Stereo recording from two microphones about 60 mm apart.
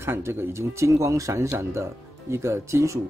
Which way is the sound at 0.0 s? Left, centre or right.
Right.